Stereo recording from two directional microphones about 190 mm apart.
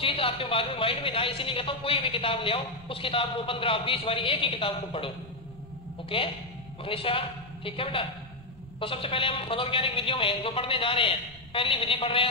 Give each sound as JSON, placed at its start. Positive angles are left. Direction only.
{"t": 0.0, "sound": "a man's voice", "side_deg": 30}